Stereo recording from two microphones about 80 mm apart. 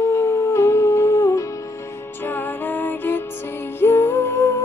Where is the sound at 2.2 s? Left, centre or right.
Left.